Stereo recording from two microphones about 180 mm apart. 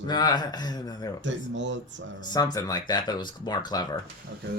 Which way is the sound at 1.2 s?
90° right.